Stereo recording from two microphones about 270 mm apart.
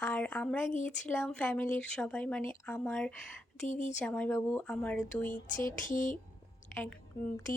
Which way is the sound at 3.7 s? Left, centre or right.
Left.